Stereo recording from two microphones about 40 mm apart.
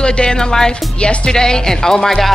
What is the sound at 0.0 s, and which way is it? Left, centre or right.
Speech, left.